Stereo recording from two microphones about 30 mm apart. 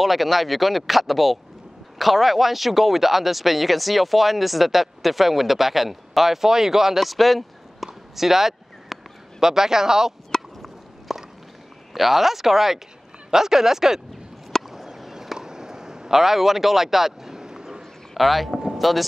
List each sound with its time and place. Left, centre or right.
0.0 s speech: centre
7.0 s a sound: centre
9.4 s speech: centre
10.3 s fowl: centre
11.1 s walk: centre
11.9 s speech: centre
14.7 s a sound: centre
15.3 s a sound: right
16.2 s speech: centre
18.1 s speech: centre
18.5 s a sound: centre
18.8 s speech: centre